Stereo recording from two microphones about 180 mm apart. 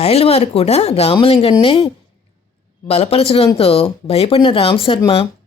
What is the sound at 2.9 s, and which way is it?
A woman's voice, 35° left (ahead or behind).